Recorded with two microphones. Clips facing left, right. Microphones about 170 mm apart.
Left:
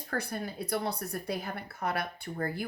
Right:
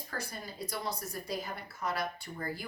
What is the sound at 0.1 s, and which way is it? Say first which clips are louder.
Speech: left 8 dB; 60° left (ahead or behind).